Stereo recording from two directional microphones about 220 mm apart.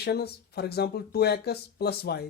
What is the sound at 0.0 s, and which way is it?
Speech, 45° left (ahead or behind).